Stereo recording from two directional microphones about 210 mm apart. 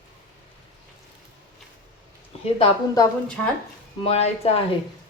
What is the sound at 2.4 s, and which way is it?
Speech, 25° left (ahead or behind).